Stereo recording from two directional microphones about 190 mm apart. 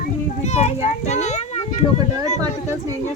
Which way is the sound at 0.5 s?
35° left (ahead or behind).